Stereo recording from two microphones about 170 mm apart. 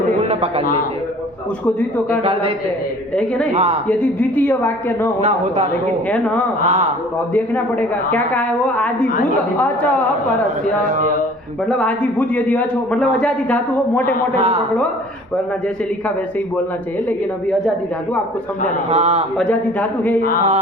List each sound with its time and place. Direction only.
0.2 s a sound: 40° right (ahead or behind)
2.2 s a man's voice: 35° right (ahead or behind)
3.2 s speech: 5° left (ahead or behind)
3.5 s a man's voice: 40° right (ahead or behind)
3.8 s a woman's voice: 5° left (ahead or behind)
11.8 s a woman's voice: 5° left (ahead or behind)
14.3 s a man's voice: 35° right (ahead or behind)
18.9 s a man's voice: 40° right (ahead or behind)
19.4 s a woman's voice: 5° left (ahead or behind)